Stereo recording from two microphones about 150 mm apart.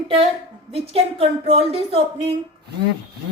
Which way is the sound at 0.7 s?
40° right (ahead or behind).